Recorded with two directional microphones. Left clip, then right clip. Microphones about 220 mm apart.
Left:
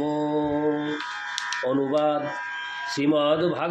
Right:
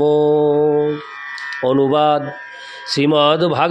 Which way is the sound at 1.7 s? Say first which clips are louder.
Right 10 dB; 45° right (ahead or behind).